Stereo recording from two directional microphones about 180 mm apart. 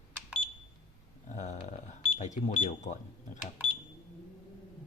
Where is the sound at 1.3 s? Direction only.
40° left (ahead or behind).